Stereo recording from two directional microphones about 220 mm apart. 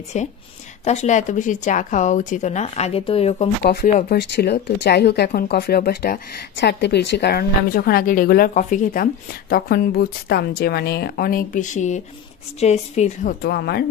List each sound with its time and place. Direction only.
0.1 s speech: 30° left (ahead or behind)
3.6 s speech: 45° left (ahead or behind)
13.4 s speech: 45° left (ahead or behind)